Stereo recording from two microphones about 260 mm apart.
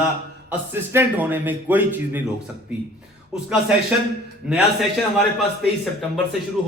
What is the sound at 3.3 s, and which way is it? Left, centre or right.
A man's voice, centre.